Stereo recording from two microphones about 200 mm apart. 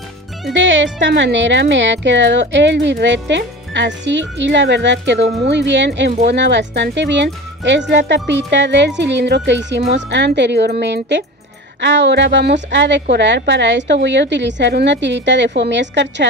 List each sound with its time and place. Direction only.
0.5 s speech: 65° right (ahead or behind)